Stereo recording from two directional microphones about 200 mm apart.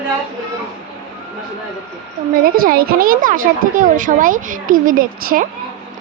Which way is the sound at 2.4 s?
45° right (ahead or behind).